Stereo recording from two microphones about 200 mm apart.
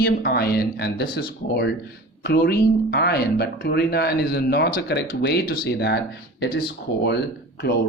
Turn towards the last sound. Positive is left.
turn(degrees=55)  # may be behind; listen again after turning